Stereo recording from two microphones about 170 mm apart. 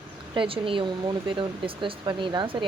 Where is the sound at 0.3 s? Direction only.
30° right (ahead or behind).